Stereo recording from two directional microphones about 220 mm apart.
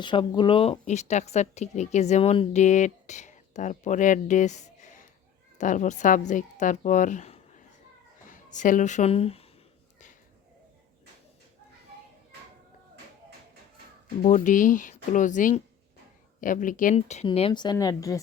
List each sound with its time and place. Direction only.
0.0 s a woman's voice: 20° left (ahead or behind)
14.2 s a woman's voice: 35° left (ahead or behind); by 18.2 s 15° left (ahead or behind)